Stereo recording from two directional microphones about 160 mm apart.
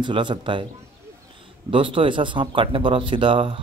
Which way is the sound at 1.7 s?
30° right (ahead or behind).